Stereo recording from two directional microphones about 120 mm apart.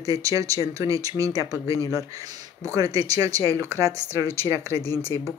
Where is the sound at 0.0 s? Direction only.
30° right (ahead or behind).